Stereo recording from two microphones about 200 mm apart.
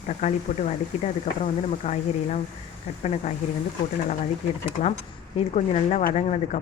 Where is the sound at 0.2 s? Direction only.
35° left (ahead or behind).